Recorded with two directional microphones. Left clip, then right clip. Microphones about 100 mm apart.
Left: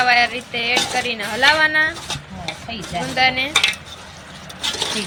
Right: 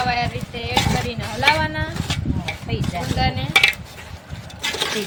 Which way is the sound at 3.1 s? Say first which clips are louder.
Left 8 dB; 15° left (ahead or behind).